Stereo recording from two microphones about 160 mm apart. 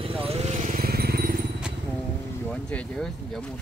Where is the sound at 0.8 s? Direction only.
75° right (ahead or behind).